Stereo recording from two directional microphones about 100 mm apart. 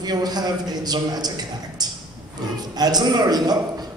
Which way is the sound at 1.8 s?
40° right (ahead or behind).